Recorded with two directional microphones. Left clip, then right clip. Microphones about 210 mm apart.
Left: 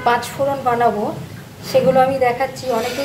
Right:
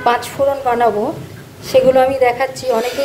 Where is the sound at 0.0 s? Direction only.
25° right (ahead or behind).